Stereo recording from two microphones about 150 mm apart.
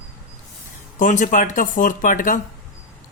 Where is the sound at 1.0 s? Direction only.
60° left (ahead or behind).